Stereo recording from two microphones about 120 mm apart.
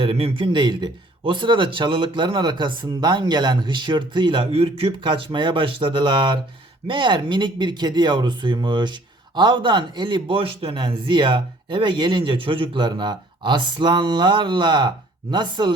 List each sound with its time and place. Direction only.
0.0 s a man's voice: 50° right (ahead or behind)